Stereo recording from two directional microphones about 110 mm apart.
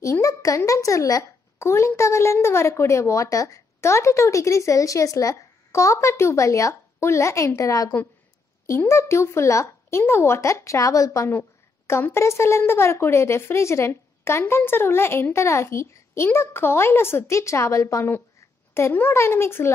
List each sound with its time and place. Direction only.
0.0 s speech: 30° left (ahead or behind)